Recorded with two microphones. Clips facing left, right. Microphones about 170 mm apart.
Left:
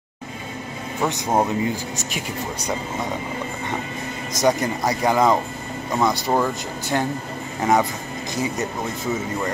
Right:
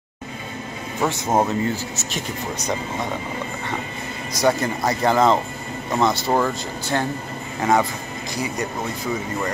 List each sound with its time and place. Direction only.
1.0 s speech: 15° left (ahead or behind)
4.4 s speech: 15° left (ahead or behind)